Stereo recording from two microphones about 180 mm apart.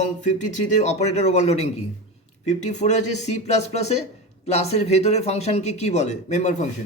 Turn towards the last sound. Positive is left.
turn(degrees=40)  # may be behind; listen again after turning